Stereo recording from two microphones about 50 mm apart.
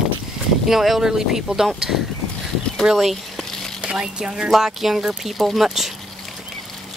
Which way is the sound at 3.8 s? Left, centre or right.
Centre.